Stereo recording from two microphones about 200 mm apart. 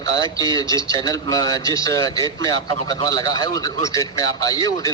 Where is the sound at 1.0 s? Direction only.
20° left (ahead or behind).